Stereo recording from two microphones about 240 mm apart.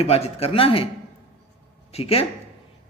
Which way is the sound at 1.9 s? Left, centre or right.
Left.